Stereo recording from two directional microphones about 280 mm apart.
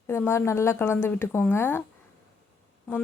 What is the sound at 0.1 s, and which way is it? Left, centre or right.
A woman's voice, centre.